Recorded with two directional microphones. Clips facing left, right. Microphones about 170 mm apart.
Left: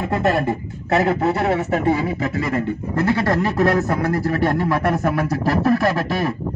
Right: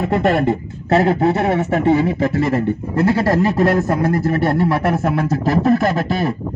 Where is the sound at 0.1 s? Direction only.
25° right (ahead or behind).